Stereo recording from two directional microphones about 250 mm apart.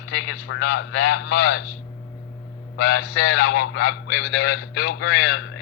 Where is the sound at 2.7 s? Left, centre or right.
Left.